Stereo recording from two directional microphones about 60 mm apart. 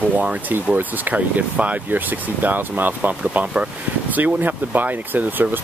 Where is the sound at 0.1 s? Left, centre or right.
Right.